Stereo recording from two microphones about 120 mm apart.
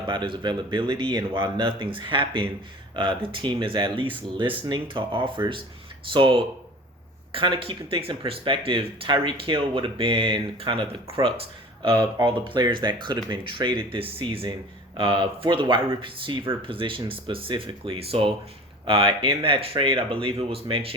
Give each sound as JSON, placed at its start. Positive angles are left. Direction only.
{"t": 0.1, "sound": "speech", "side_deg": -40}